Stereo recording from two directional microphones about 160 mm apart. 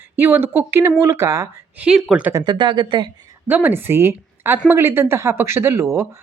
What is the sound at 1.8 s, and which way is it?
Speech, 5° right (ahead or behind).